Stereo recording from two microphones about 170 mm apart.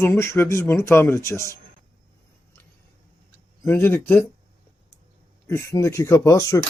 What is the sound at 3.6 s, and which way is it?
Speech, 10° left (ahead or behind).